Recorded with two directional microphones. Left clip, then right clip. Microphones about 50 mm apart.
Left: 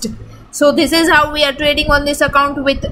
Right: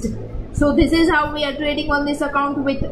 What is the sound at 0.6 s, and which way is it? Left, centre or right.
A woman's voice, left.